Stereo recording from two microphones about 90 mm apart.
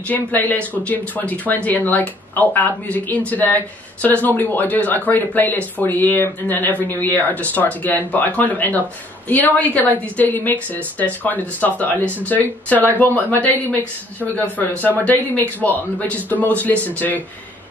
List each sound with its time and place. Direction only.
0.1 s a woman's voice: 20° left (ahead or behind)